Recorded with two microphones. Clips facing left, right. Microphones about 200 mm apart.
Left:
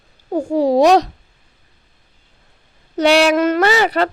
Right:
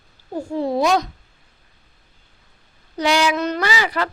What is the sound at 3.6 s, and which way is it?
Speech, 60° left (ahead or behind).